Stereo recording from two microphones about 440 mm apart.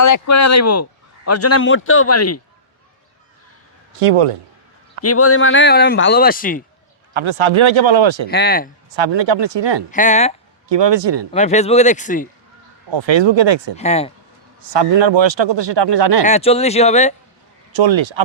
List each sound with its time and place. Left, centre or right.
0.0 s a man's voice: left
5.0 s a man's voice: left
7.1 s speech: right
8.3 s a man's voice: left
8.9 s speech: right
9.9 s speech: centre
10.7 s speech: right
11.3 s speech: centre
12.9 s speech: right
13.7 s speech: centre
14.6 s speech: right
16.2 s speech: centre
17.7 s speech: right